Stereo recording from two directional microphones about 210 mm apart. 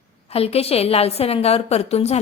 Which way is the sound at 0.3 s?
30° left (ahead or behind).